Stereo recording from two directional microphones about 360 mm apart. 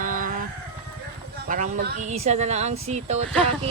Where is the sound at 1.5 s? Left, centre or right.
Right.